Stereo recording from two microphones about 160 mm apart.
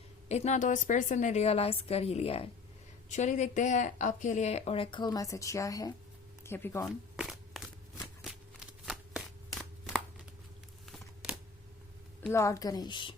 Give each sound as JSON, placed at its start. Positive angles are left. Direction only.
{"t": 0.3, "sound": "speech", "side_deg": 45}
{"t": 3.1, "sound": "speech", "side_deg": 50}
{"t": 7.2, "sound": "a sound", "side_deg": 0}
{"t": 12.3, "sound": "a woman's voice", "side_deg": 20}